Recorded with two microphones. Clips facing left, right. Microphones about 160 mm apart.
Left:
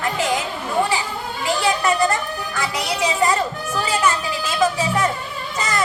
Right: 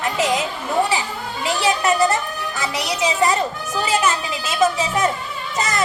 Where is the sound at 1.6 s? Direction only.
20° right (ahead or behind).